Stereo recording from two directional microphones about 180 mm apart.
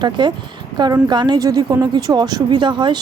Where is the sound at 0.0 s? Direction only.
25° right (ahead or behind).